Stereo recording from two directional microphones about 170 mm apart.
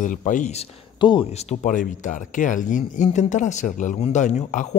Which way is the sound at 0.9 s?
30° left (ahead or behind).